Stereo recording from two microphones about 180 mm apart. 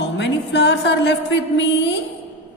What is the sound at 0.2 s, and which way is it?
A woman's voice, 75° left (ahead or behind).